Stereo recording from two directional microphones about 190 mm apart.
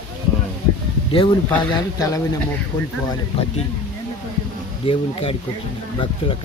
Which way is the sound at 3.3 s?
30° left (ahead or behind).